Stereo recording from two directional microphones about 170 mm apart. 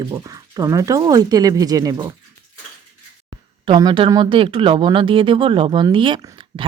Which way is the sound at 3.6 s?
30° right (ahead or behind).